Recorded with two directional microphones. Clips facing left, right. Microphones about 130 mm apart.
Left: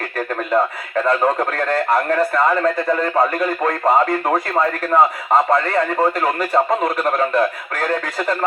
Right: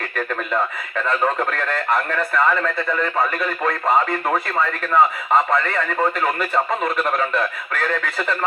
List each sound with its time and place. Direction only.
0.5 s speech: 40° left (ahead or behind)